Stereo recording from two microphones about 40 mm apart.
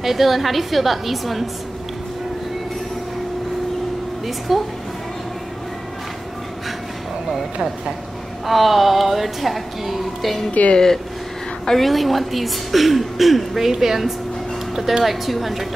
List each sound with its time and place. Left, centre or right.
0.0 s a woman's voice: centre
4.5 s a woman's voice: centre
8.5 s a woman's voice: centre
10.7 s speech: centre
11.7 s a woman's voice: centre